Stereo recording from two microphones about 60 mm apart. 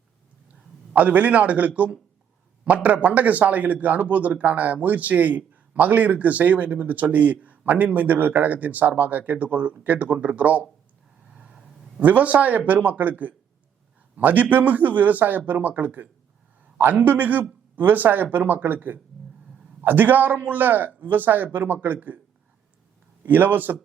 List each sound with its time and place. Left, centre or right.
0.9 s speech: right
11.3 s a man's voice: centre; by 22.2 s right
23.2 s a man's voice: right